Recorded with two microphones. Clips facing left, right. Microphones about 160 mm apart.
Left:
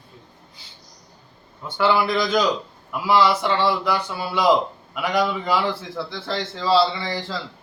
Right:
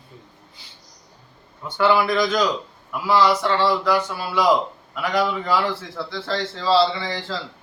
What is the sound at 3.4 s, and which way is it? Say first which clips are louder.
A man's voice: right 1 dB; 15° left (ahead or behind).